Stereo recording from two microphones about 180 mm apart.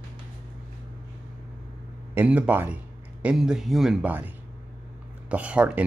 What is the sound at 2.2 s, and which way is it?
Speech, 10° right (ahead or behind).